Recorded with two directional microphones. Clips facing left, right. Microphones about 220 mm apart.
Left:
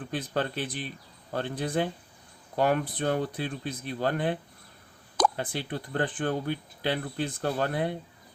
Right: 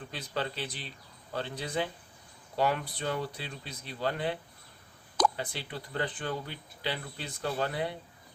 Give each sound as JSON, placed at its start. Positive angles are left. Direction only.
{"t": 0.1, "sound": "speech", "side_deg": 50}